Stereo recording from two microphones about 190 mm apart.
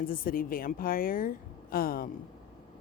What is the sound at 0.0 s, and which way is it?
A woman's voice, 45° left (ahead or behind).